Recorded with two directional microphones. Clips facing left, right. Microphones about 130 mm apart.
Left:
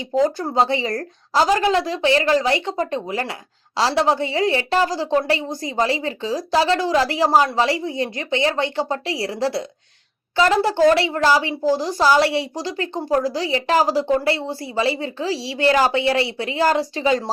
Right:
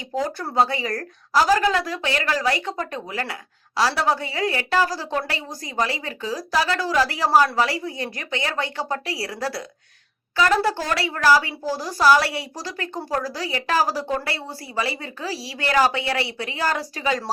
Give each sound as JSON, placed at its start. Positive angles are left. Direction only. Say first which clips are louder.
{"t": 0.0, "sound": "a woman's voice", "louder": "left 7 dB", "side_deg": 25}